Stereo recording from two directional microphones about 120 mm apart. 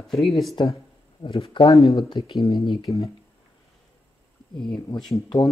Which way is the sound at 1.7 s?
30° left (ahead or behind).